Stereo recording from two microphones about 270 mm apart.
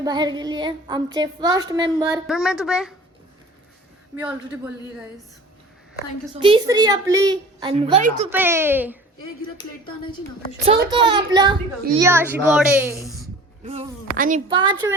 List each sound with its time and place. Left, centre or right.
0.0 s a woman's voice: centre
2.2 s speech: centre
6.4 s a woman's voice: centre
8.3 s a woman's voice: centre
9.6 s speech: centre
10.9 s a woman's voice: centre
13.7 s speech: right
14.4 s a woman's voice: centre